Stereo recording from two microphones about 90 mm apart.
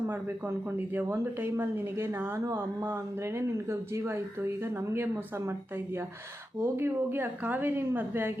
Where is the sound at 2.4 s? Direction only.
35° right (ahead or behind).